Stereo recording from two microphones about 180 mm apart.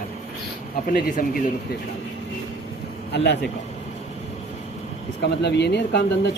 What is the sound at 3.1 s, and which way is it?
Speech, 75° left (ahead or behind).